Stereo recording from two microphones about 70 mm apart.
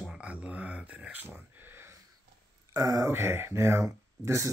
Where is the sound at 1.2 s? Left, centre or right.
Right.